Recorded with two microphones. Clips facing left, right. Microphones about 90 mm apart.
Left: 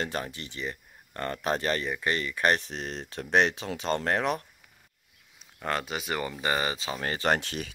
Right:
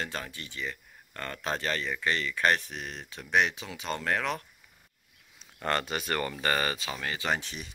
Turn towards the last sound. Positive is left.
turn(degrees=70)  # may be behind; listen again after turning